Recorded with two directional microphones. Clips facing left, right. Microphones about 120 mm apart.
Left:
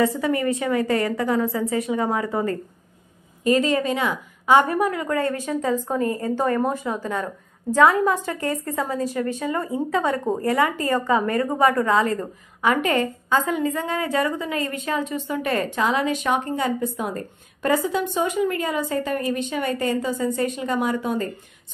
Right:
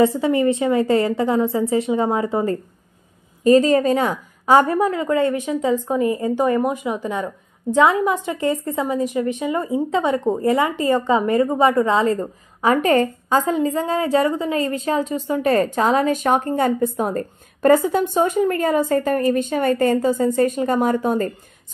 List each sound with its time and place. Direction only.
0.0 s a woman's voice: 25° right (ahead or behind)
3.4 s a woman's voice: 40° right (ahead or behind)